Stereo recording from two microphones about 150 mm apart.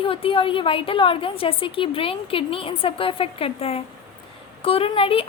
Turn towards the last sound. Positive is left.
turn(degrees=40)  # may be behind; listen again after turning